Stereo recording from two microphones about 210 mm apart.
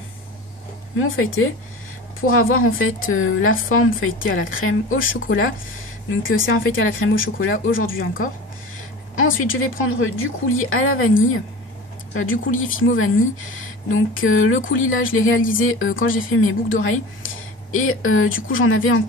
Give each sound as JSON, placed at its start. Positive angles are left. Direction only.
{"t": 0.9, "sound": "a woman's voice", "side_deg": 70}
{"t": 9.1, "sound": "a woman's voice", "side_deg": 70}